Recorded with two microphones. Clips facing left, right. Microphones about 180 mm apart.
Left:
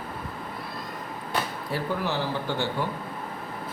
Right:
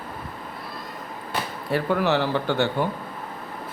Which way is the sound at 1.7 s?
70° right (ahead or behind).